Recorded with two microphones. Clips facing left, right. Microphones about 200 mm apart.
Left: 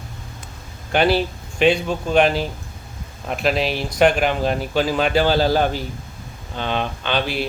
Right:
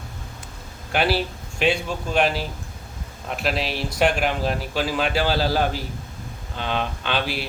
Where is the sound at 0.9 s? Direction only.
5° right (ahead or behind).